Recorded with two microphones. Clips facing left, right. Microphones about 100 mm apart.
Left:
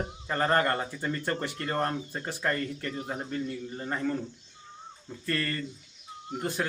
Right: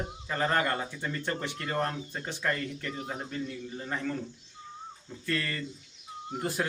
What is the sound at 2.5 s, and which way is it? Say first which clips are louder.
Speech: left 2 dB; 5° right (ahead or behind).